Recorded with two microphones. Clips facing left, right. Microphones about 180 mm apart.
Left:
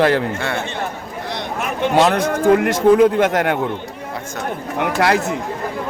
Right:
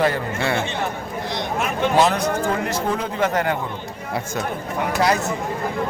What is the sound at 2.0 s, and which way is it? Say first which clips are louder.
A man's voice: left 4 dB; 65° left (ahead or behind).